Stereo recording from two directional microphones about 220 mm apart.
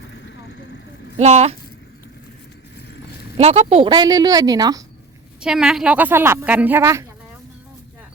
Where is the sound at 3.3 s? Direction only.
25° right (ahead or behind).